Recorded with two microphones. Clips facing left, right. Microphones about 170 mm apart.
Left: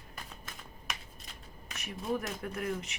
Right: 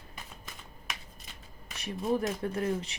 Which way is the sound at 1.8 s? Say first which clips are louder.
Right 5 dB; 35° right (ahead or behind).